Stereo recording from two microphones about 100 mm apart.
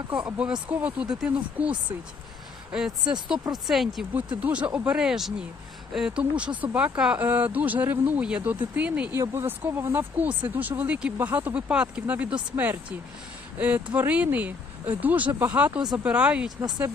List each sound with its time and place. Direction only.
0.3 s speech: 10° right (ahead or behind)
3.1 s speech: 5° right (ahead or behind)
4.4 s speech: 15° right (ahead or behind)
16.6 s speech: 45° right (ahead or behind)